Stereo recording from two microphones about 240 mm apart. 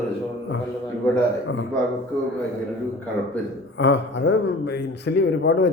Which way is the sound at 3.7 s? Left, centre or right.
Left.